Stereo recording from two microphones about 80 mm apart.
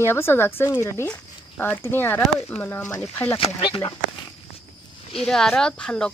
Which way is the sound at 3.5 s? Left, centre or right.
Left.